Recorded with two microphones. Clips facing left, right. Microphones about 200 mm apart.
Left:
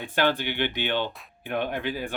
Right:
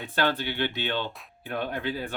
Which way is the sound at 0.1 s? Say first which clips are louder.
Left 2 dB; 15° left (ahead or behind).